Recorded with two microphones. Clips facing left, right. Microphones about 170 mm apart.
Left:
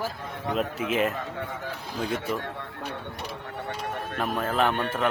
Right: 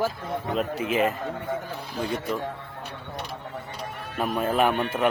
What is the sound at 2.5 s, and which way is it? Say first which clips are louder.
Speech: left 3 dB; 75° left (ahead or behind).